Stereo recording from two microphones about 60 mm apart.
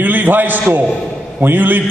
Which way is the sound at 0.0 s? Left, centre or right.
Right.